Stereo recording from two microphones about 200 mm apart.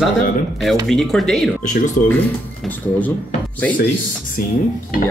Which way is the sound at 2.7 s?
10° left (ahead or behind).